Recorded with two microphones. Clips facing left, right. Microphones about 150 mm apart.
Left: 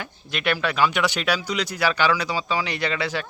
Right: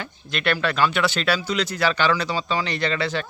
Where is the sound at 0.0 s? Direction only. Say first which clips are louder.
Right 1 dB; 10° left (ahead or behind).